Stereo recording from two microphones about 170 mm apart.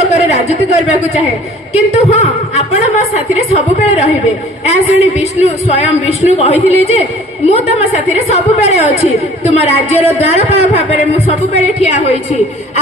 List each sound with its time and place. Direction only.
0.0 s a woman's voice: 40° left (ahead or behind)